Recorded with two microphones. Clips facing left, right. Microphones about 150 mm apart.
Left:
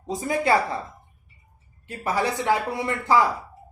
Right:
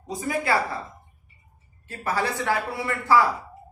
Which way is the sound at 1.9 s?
15° left (ahead or behind).